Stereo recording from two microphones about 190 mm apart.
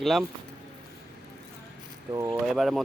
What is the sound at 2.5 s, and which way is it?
Speech, centre (ahead or behind).